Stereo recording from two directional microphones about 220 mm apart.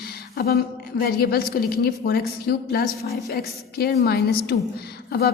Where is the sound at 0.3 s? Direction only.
45° left (ahead or behind).